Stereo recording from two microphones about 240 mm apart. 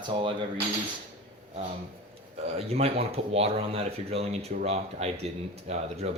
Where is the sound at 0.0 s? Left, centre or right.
Centre.